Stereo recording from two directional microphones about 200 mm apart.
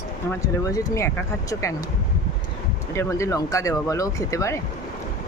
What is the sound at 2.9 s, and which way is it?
Speech, 15° left (ahead or behind).